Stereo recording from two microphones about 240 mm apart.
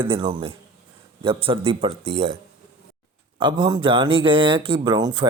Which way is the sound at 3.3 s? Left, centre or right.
Centre.